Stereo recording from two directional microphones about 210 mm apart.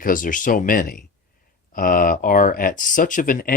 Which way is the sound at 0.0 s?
40° left (ahead or behind).